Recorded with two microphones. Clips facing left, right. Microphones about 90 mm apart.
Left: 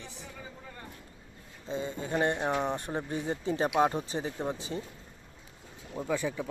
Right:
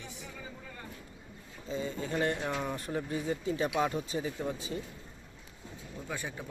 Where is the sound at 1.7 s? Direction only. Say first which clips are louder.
Left 2 dB; 30° left (ahead or behind).